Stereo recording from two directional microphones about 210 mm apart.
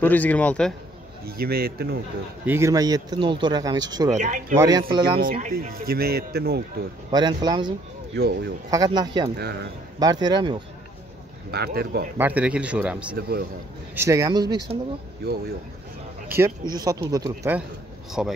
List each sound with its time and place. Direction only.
0.0 s speech: 10° left (ahead or behind)
1.2 s speech: 45° right (ahead or behind)
2.4 s speech: 10° right (ahead or behind)
4.2 s speech: 35° right (ahead or behind)
4.6 s speech: 20° right (ahead or behind)
5.3 s speech: 40° right (ahead or behind)
7.1 s speech: 20° right (ahead or behind)
8.2 s speech: 50° right (ahead or behind)
8.6 s speech: 20° right (ahead or behind)
11.5 s speech: 50° right (ahead or behind)
12.2 s speech: 5° right (ahead or behind)
13.1 s speech: 45° right (ahead or behind)
13.9 s speech: 15° right (ahead or behind)
16.3 s speech: 10° right (ahead or behind)